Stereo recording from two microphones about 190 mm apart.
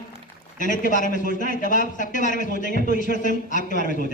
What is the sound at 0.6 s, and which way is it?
A woman's voice, 45° left (ahead or behind).